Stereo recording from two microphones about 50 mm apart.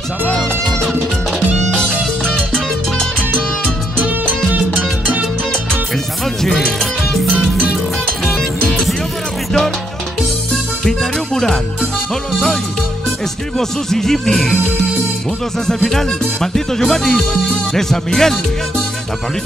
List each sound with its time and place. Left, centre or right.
1.8 s music: centre
6.4 s music: centre
10.5 s music: centre
13.6 s speech: centre
15.6 s speech: centre